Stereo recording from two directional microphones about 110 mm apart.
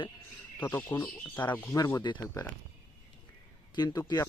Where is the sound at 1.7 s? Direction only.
35° left (ahead or behind).